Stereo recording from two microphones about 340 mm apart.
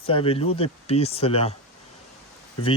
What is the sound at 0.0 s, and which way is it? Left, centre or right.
Speech, centre.